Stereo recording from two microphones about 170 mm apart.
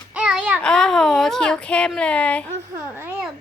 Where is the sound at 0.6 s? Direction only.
5° left (ahead or behind).